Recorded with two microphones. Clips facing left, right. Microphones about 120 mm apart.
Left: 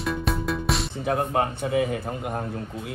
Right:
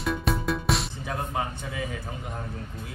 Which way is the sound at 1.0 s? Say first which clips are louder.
Left 7 dB; 60° left (ahead or behind).